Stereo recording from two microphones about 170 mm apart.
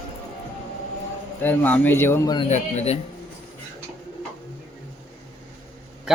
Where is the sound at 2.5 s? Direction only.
40° left (ahead or behind).